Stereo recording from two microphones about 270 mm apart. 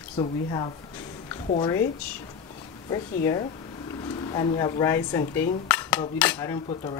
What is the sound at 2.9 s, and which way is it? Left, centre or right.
A woman's voice, centre.